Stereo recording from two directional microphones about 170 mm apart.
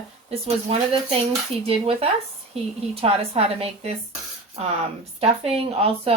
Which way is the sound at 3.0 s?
35° right (ahead or behind).